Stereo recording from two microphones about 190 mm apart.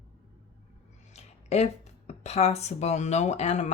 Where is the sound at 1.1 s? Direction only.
35° left (ahead or behind).